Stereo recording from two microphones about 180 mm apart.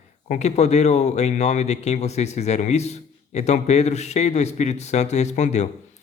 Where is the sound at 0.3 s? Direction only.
40° left (ahead or behind).